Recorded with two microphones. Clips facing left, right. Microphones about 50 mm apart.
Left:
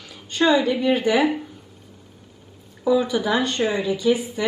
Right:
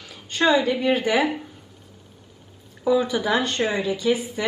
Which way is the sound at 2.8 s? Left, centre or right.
Centre.